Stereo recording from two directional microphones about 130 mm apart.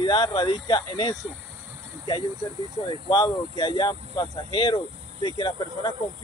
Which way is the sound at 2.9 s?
35° left (ahead or behind).